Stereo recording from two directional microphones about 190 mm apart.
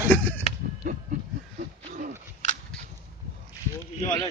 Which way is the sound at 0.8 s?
45° right (ahead or behind).